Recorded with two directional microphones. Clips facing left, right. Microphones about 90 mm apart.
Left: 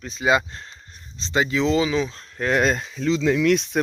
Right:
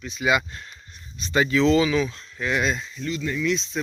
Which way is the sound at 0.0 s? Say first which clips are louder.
Left 2 dB; 35° left (ahead or behind).